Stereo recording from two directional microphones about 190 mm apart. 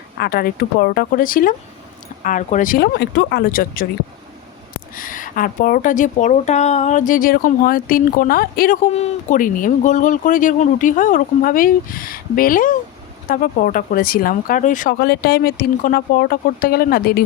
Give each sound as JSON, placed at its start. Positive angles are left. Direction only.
{"t": 0.2, "sound": "a woman's voice", "side_deg": 50}
{"t": 4.9, "sound": "a woman's voice", "side_deg": 45}